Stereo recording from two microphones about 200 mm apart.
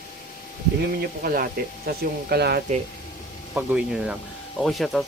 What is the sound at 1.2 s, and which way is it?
Speech, 50° right (ahead or behind).